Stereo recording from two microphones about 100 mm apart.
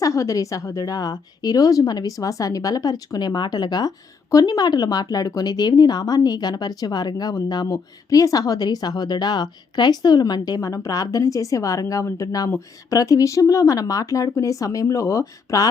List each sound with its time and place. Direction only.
0.0 s a woman's voice: 30° left (ahead or behind)